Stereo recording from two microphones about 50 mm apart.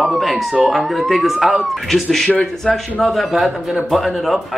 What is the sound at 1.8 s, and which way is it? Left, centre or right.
Speech, centre.